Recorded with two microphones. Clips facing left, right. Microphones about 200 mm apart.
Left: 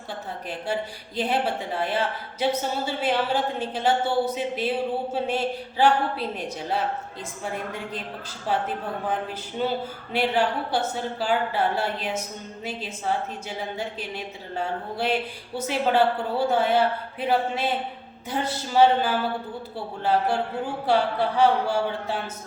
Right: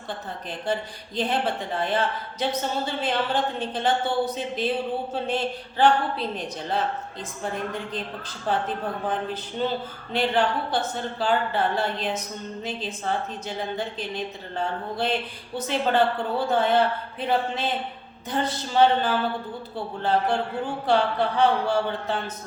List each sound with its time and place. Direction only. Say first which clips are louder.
0.7 s speech: right 2 dB; 10° left (ahead or behind)